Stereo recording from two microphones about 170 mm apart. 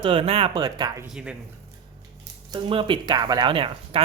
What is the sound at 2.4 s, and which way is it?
Speech, 30° right (ahead or behind).